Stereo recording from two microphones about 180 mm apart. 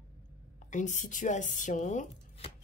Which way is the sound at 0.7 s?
45° left (ahead or behind).